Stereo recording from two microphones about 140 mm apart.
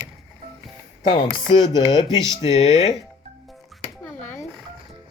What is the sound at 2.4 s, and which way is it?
Speech, 55° left (ahead or behind).